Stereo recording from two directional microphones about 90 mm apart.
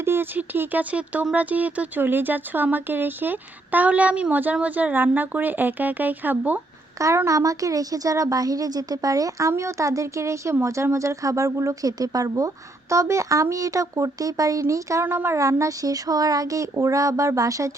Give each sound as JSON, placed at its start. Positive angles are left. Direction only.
{"t": 0.0, "sound": "speech", "side_deg": -25}
{"t": 7.3, "sound": "a woman's voice", "side_deg": -40}